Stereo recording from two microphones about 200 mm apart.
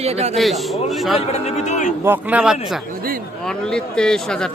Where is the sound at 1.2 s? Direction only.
30° left (ahead or behind).